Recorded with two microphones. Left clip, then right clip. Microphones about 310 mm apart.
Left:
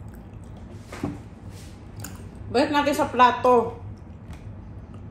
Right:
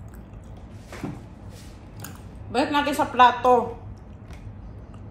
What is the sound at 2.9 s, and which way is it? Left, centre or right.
Speech, centre.